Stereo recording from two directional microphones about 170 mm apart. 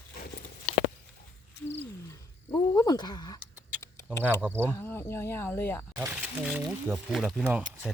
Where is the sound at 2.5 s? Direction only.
25° left (ahead or behind).